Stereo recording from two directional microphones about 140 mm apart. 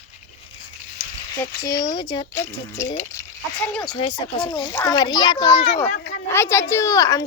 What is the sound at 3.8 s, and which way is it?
Speech, 35° left (ahead or behind).